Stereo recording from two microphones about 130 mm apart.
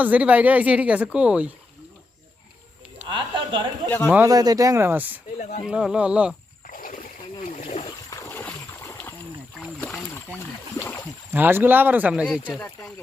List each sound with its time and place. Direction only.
0.0 s speech: 10° right (ahead or behind)
3.1 s a sound: 40° right (ahead or behind)
3.8 s a man's voice: 15° left (ahead or behind)
4.3 s speech: 30° right (ahead or behind)
5.4 s speech: 60° left (ahead or behind)
5.6 s speech: 5° right (ahead or behind)
6.7 s boat: 90° left; by 7.9 s 60° left (ahead or behind)
8.1 s splash: 20° left (ahead or behind)
10.2 s rowboat: 20° left (ahead or behind)
11.3 s speech: 15° right (ahead or behind)